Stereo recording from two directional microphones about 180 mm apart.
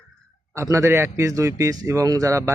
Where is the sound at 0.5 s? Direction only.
15° right (ahead or behind).